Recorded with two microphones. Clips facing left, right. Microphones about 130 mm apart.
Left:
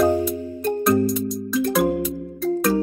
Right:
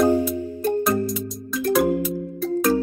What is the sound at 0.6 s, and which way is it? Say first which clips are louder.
Music: left 3 dB; centre (ahead or behind).